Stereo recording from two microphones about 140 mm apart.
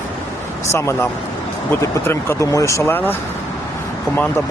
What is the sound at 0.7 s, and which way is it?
Speech, 15° left (ahead or behind).